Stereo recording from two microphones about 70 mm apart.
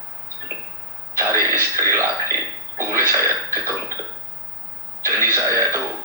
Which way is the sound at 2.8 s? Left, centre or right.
Right.